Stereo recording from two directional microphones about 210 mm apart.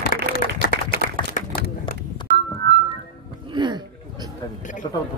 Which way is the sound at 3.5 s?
20° right (ahead or behind).